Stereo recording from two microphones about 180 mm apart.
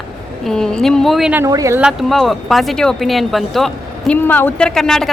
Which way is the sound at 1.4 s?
15° right (ahead or behind).